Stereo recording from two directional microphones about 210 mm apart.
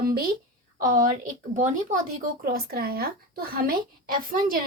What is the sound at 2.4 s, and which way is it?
A woman's voice, 45° right (ahead or behind).